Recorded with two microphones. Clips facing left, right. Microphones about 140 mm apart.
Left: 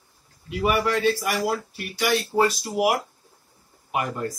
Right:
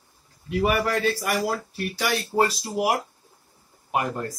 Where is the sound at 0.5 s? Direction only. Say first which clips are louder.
Even; 40° right (ahead or behind).